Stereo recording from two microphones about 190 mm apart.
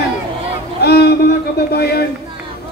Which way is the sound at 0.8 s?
60° left (ahead or behind).